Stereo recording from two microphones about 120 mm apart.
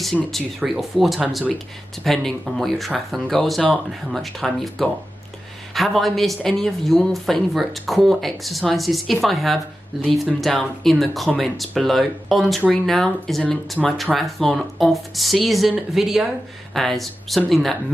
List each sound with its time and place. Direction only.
0.0 s speech: centre (ahead or behind)